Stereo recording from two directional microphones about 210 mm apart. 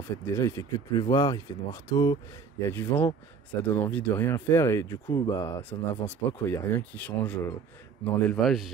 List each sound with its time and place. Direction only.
0.4 s a man's voice: 15° left (ahead or behind); by 8.7 s centre (ahead or behind)